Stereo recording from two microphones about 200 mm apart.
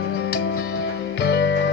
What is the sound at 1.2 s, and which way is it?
Music, 60° left (ahead or behind).